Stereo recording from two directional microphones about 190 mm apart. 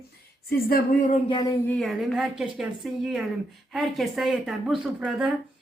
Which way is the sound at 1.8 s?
Centre (ahead or behind).